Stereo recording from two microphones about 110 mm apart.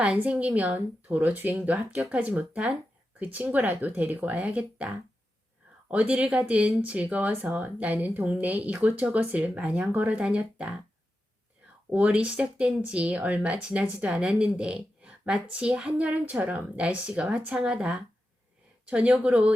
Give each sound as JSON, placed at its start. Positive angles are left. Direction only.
{"t": 0.0, "sound": "speech", "side_deg": -10}
{"t": 5.9, "sound": "speech", "side_deg": -10}
{"t": 11.9, "sound": "speech", "side_deg": -10}